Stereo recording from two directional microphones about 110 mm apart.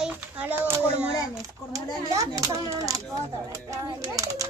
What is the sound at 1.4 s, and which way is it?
Speech, 30° right (ahead or behind).